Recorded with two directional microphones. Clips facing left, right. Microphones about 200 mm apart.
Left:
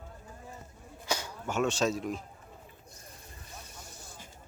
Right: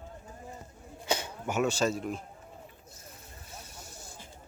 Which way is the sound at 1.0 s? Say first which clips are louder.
Right 3 dB; 20° right (ahead or behind).